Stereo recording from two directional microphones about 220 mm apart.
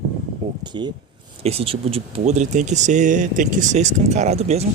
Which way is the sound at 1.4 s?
25° right (ahead or behind).